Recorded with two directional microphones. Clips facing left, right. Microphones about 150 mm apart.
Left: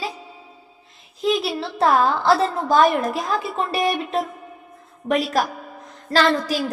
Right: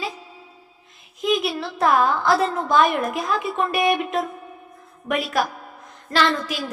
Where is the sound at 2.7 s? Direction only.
35° left (ahead or behind).